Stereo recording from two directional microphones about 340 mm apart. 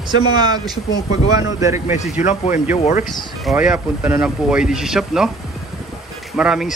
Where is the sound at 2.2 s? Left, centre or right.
Left.